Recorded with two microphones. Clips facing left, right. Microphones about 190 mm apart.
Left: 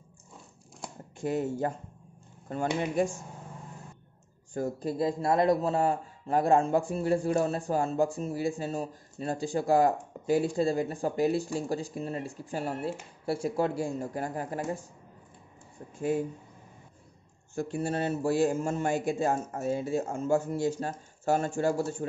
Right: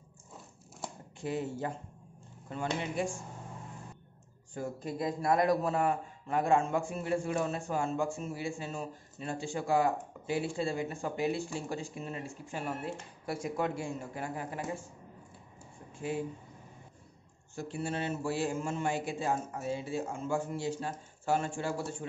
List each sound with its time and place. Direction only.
1.2 s a man's voice: 45° left (ahead or behind)
4.6 s a man's voice: 35° left (ahead or behind)
16.0 s a man's voice: 45° left (ahead or behind)
17.6 s a man's voice: 45° left (ahead or behind)